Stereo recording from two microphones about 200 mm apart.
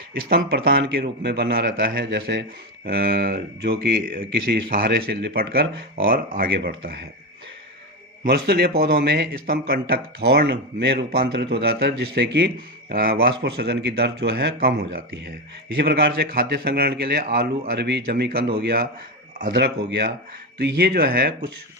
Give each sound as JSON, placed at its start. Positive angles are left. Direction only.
{"t": 0.1, "sound": "speech", "side_deg": -50}
{"t": 8.2, "sound": "a man's voice", "side_deg": -55}